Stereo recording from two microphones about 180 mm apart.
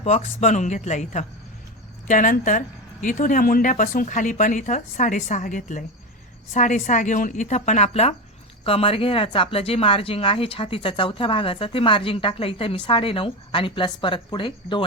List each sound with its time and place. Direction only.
0.0 s speech: 35° left (ahead or behind)